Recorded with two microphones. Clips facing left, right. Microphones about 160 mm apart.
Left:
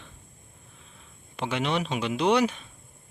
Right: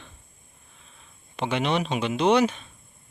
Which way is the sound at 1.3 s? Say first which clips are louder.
Right 3 dB; 5° left (ahead or behind).